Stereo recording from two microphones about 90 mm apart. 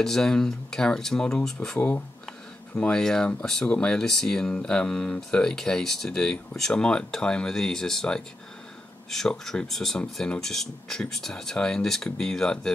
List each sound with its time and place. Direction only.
0.0 s speech: 5° left (ahead or behind)
1.8 s speech: 20° left (ahead or behind)